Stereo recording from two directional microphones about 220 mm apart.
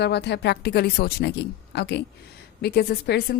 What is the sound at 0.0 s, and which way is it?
A woman's voice, 50° left (ahead or behind).